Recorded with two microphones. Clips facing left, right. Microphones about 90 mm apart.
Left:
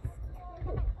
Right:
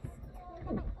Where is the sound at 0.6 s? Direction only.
20° right (ahead or behind).